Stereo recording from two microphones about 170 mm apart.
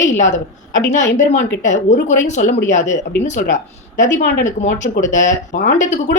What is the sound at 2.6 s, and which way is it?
Speech, 45° left (ahead or behind).